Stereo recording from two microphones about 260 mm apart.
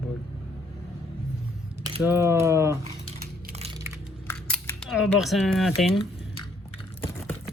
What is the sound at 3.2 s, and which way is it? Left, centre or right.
Crushing, right.